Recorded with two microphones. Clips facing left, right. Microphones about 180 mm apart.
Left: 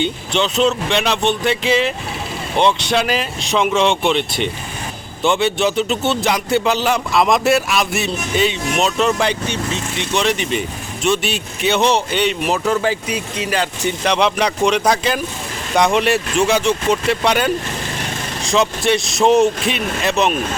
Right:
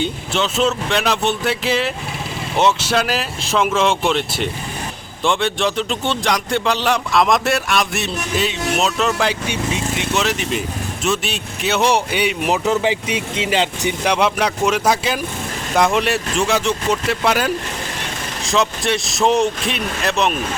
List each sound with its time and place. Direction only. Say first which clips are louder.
0.0 s speech: left 2 dB; centre (ahead or behind); by 13.9 s 20° right (ahead or behind)
14.0 s speech: left 1 dB; 10° right (ahead or behind)